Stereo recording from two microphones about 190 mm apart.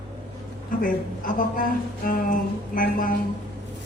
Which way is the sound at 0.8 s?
45° left (ahead or behind).